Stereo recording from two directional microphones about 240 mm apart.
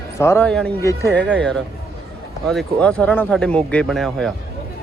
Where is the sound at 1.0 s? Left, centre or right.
Right.